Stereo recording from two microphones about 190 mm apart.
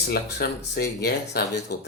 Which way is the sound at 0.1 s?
55° left (ahead or behind).